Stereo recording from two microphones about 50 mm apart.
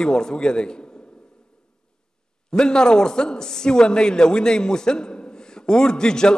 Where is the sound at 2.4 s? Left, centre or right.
Centre.